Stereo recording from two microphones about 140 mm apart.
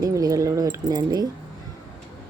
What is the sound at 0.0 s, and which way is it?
Speech, 25° right (ahead or behind).